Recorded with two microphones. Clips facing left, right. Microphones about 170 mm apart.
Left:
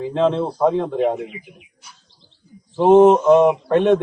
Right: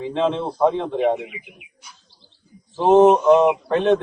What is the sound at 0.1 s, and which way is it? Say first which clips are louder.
A man's voice: left 3 dB; centre (ahead or behind).